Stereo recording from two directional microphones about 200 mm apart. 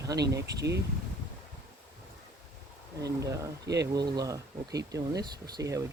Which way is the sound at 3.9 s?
20° right (ahead or behind).